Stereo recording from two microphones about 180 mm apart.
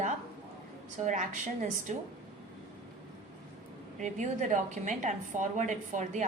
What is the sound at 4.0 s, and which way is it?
A woman's voice, 45° right (ahead or behind).